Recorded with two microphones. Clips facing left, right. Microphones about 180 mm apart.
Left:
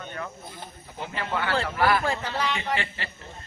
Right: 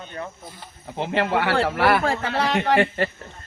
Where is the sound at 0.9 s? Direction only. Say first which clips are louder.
Right 9 dB; 75° right (ahead or behind).